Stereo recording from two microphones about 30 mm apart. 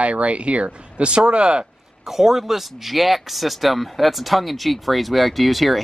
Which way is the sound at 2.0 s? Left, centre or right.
Centre.